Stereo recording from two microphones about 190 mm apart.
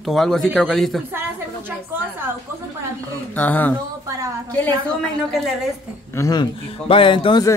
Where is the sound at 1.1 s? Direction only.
10° right (ahead or behind).